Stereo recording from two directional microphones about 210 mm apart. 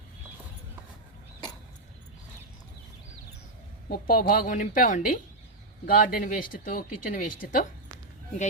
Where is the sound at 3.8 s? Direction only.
45° left (ahead or behind).